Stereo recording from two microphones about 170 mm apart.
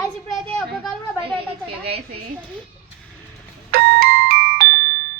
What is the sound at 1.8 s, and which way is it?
Speech, 70° right (ahead or behind).